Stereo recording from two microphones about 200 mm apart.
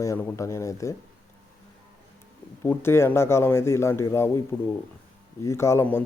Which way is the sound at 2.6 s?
10° left (ahead or behind).